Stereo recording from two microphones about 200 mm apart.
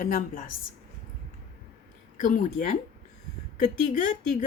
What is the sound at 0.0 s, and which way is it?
Speech, 40° left (ahead or behind).